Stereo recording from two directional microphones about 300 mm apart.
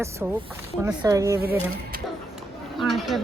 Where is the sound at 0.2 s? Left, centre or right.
Centre.